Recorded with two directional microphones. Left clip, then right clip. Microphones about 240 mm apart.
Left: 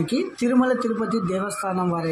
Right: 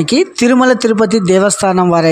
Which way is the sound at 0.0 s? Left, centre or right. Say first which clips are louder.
Right 12 dB; right.